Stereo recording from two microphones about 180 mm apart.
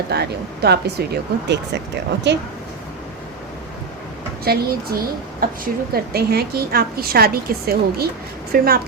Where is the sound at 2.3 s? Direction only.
75° right (ahead or behind).